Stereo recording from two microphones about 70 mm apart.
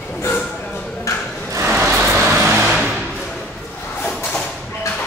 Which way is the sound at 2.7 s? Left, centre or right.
Centre.